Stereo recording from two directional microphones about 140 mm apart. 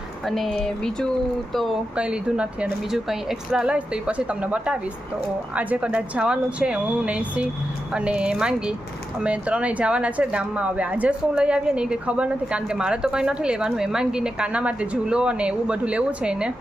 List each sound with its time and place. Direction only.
0.3 s speech: centre (ahead or behind)
1.5 s speech: 5° right (ahead or behind)